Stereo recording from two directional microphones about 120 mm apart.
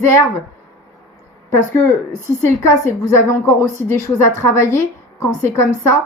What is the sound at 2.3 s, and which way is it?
A woman's voice, 25° left (ahead or behind).